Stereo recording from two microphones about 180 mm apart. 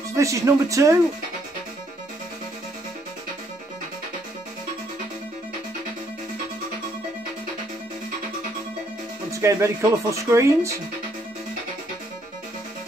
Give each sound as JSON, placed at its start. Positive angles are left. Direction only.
{"t": 0.2, "sound": "speech", "side_deg": -15}
{"t": 9.3, "sound": "speech", "side_deg": -15}